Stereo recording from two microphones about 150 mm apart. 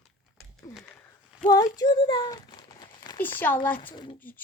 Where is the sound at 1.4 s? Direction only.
25° left (ahead or behind).